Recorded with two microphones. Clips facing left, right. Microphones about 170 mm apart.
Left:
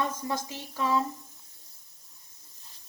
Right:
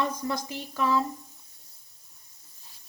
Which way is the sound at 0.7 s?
20° left (ahead or behind).